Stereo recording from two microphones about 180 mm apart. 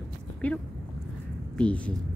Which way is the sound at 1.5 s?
5° left (ahead or behind).